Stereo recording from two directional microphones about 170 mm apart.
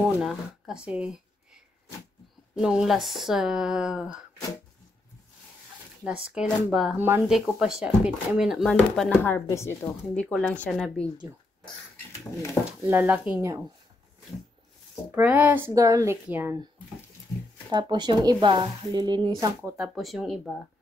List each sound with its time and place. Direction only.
0.0 s speech: 5° right (ahead or behind)
2.5 s speech: 5° right (ahead or behind)
6.3 s speech: 5° right (ahead or behind)
12.8 s speech: 10° right (ahead or behind)
15.0 s speech: 10° right (ahead or behind)
17.6 s speech: 25° right (ahead or behind)
19.8 s speech: centre (ahead or behind)